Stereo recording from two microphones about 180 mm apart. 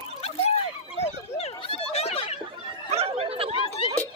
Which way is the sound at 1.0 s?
35° left (ahead or behind).